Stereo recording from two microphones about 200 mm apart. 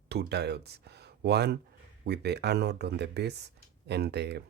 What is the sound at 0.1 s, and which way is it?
Speech, 55° right (ahead or behind).